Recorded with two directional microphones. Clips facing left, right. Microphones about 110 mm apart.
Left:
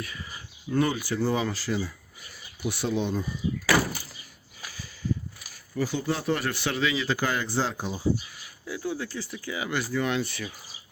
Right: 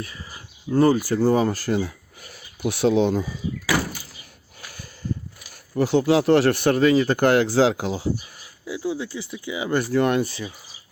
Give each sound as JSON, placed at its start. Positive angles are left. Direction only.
{"t": 0.7, "sound": "speech", "side_deg": -35}
{"t": 2.6, "sound": "speech", "side_deg": -75}
{"t": 5.7, "sound": "speech", "side_deg": -65}
{"t": 8.6, "sound": "speech", "side_deg": -15}
{"t": 9.7, "sound": "speech", "side_deg": -60}
{"t": 10.2, "sound": "speech", "side_deg": -30}